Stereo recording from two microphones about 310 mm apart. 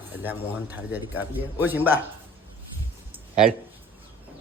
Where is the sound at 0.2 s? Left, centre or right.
Centre.